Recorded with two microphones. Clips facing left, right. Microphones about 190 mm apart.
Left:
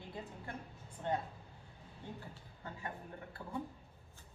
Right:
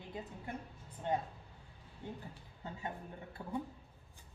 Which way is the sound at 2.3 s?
20° right (ahead or behind).